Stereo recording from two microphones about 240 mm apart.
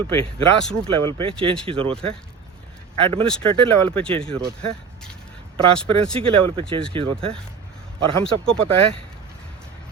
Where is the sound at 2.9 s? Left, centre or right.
Right.